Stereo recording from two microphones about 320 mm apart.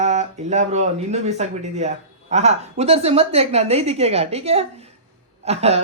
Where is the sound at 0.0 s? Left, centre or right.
Right.